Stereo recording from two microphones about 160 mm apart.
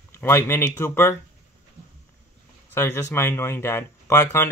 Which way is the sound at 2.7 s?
15° left (ahead or behind).